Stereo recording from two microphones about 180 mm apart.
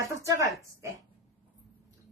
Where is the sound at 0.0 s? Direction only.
20° right (ahead or behind).